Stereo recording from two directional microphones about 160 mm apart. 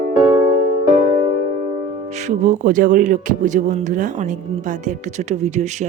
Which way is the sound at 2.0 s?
45° right (ahead or behind).